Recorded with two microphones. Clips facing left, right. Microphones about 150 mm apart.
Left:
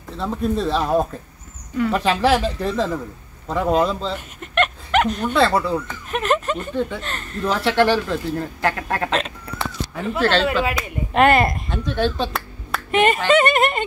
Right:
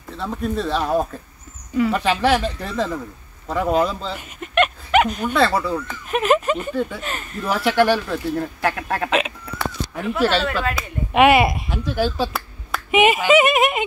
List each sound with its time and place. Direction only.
0.6 s speech: centre (ahead or behind)
10.4 s speech: 15° left (ahead or behind)
10.8 s speech: 5° right (ahead or behind)